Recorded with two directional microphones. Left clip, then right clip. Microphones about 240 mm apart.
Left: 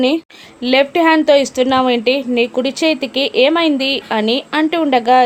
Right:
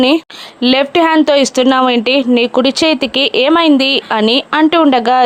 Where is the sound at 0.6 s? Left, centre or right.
Centre.